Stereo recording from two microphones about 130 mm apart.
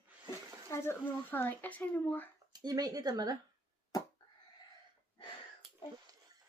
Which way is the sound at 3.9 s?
25° left (ahead or behind).